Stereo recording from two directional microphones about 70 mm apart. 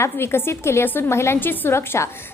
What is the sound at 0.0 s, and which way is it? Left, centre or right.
A woman's voice, left.